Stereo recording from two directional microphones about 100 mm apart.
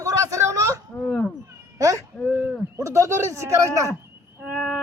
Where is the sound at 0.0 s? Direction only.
35° right (ahead or behind).